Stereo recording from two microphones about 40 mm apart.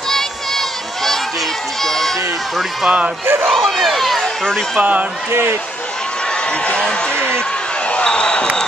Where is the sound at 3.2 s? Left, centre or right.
Right.